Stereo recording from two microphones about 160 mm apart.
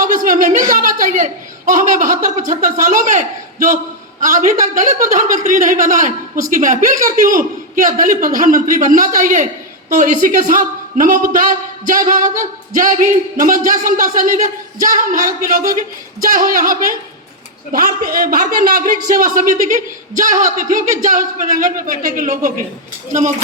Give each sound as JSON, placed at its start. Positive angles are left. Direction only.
{"t": 0.0, "sound": "a man's voice", "side_deg": -55}